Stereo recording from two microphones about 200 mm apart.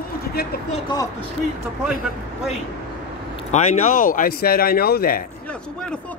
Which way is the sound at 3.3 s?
40° left (ahead or behind).